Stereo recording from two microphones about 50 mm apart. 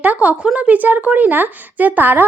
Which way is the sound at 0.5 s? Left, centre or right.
Right.